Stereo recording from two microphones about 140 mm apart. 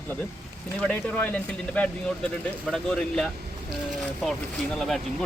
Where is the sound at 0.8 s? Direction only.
10° left (ahead or behind).